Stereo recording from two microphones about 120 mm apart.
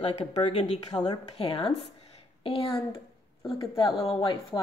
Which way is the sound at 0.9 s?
35° left (ahead or behind).